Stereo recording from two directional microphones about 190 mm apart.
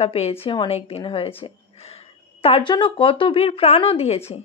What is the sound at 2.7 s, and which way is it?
Speech, 25° left (ahead or behind).